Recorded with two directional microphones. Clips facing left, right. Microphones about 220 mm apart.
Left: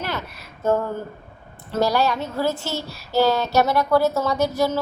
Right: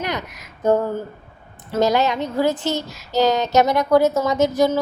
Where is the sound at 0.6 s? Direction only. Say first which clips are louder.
Right 3 dB; 15° right (ahead or behind).